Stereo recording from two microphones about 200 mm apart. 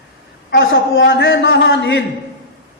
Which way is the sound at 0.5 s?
60° left (ahead or behind).